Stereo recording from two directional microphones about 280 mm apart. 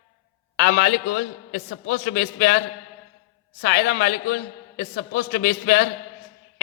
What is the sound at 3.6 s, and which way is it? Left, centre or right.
A man's voice, left.